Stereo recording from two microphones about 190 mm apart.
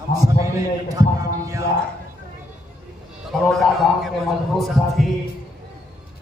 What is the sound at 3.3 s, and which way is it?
A man's voice, centre (ahead or behind).